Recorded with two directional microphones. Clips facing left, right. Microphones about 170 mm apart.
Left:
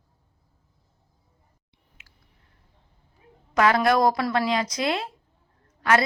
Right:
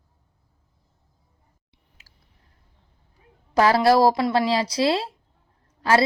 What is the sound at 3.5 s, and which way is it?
A woman's voice, 30° right (ahead or behind).